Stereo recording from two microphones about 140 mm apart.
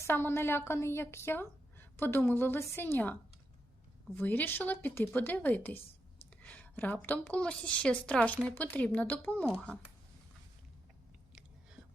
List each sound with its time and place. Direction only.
0.0 s a woman's voice: 15° left (ahead or behind)